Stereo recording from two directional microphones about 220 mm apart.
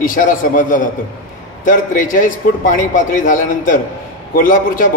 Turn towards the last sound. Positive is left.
turn(degrees=40)  # may be behind; listen again after turning